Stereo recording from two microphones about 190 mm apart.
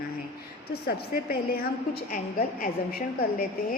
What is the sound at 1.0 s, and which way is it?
A woman's voice, 55° left (ahead or behind).